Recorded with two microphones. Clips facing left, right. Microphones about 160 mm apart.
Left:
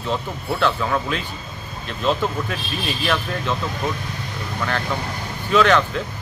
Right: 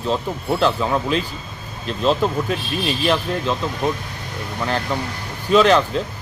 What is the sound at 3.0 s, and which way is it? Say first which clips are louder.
Speech: right 3 dB; 25° right (ahead or behind).